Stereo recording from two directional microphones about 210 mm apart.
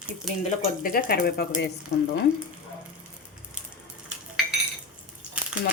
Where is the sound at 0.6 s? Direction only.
40° left (ahead or behind).